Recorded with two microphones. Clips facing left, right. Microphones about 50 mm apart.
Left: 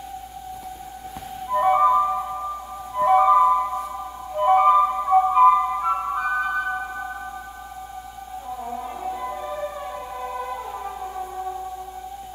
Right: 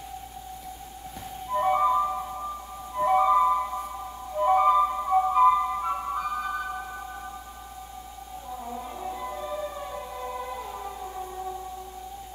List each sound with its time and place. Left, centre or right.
1.5 s music: left
3.4 s music: centre
4.4 s music: left
8.6 s music: centre